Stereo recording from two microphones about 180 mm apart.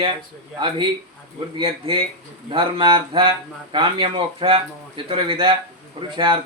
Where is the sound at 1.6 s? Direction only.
30° right (ahead or behind).